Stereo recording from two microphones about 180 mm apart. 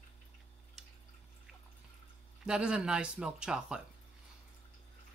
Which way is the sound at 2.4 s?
5° right (ahead or behind).